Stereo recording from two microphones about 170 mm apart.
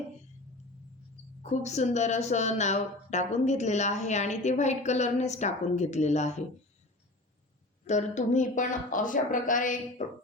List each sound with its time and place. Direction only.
1.4 s a woman's voice: 45° left (ahead or behind)
7.9 s a woman's voice: 45° left (ahead or behind)